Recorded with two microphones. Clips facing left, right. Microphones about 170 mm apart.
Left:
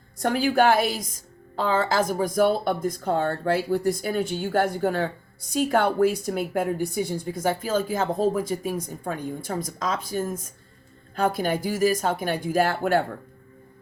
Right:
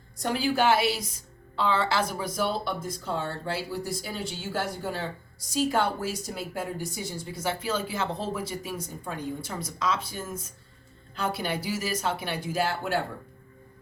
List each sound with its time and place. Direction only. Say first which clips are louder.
0.2 s speech: left 5 dB; 55° left (ahead or behind)